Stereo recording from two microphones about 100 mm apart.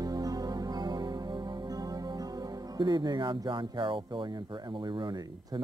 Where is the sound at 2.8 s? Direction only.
45° right (ahead or behind).